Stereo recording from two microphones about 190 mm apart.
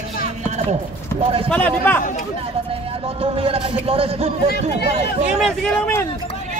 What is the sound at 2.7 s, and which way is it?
Speech, 30° right (ahead or behind).